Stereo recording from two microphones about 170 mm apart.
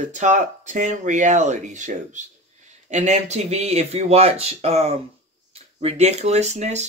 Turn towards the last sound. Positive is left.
turn(degrees=-40)  # may be behind; listen again after turning